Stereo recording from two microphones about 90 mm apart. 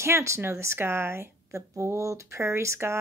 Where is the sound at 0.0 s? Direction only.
30° right (ahead or behind).